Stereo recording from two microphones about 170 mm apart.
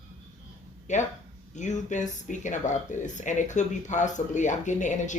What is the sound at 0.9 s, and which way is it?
Speech, 45° left (ahead or behind).